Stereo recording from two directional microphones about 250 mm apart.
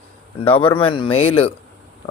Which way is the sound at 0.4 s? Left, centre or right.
Left.